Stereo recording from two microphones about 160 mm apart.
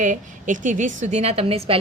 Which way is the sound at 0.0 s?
55° right (ahead or behind).